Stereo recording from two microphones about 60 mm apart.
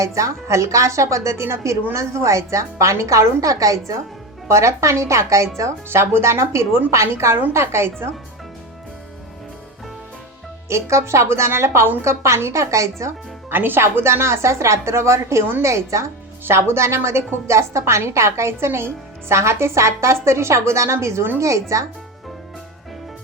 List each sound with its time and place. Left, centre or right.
0.0 s a woman's voice: right
4.4 s a woman's voice: right
10.7 s a woman's voice: right
13.5 s speech: right
13.8 s a woman's voice: right
16.4 s a woman's voice: right